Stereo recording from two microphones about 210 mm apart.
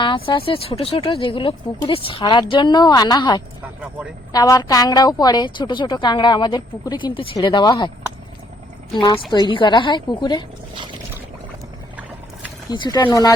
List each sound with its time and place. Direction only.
0.0 s a woman's voice: 25° left (ahead or behind)
9.0 s a woman's voice: 25° left (ahead or behind)
12.7 s a woman's voice: 20° left (ahead or behind)